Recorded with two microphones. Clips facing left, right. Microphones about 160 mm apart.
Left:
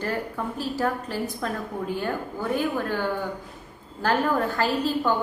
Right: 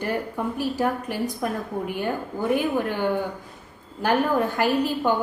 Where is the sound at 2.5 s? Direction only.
15° right (ahead or behind).